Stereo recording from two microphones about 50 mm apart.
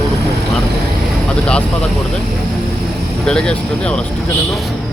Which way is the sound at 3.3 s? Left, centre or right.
Centre.